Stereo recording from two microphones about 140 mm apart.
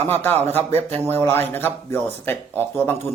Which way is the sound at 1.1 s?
15° left (ahead or behind).